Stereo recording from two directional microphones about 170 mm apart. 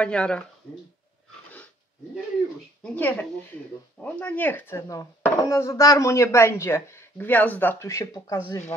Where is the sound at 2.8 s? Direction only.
5° left (ahead or behind).